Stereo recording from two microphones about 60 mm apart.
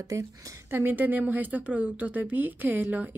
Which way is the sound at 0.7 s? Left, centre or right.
Right.